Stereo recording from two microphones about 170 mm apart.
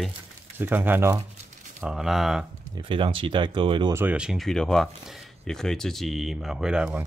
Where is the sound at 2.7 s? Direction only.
30° right (ahead or behind).